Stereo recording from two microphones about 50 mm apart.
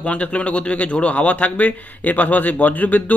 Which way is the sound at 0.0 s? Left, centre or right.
Left.